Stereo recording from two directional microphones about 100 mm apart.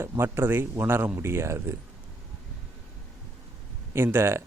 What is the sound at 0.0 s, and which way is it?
Speech, 25° right (ahead or behind).